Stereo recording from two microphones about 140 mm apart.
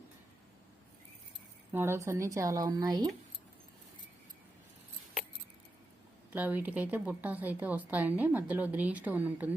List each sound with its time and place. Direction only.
1.7 s speech: 15° right (ahead or behind)
6.3 s speech: 10° right (ahead or behind)